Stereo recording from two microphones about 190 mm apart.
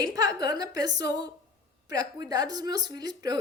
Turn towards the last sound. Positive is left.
turn(degrees=-20)  # may be behind; listen again after turning